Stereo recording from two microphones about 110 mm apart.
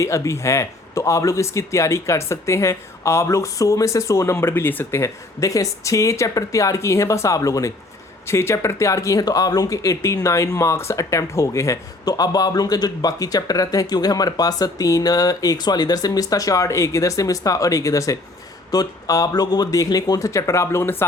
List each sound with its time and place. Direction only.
0.0 s speech: 25° left (ahead or behind)